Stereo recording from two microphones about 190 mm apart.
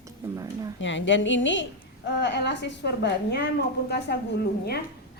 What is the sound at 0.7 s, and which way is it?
A woman's voice, 75° left (ahead or behind).